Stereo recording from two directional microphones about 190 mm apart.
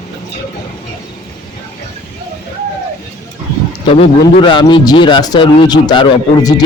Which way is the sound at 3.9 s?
30° left (ahead or behind).